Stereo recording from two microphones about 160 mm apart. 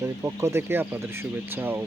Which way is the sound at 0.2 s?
15° right (ahead or behind).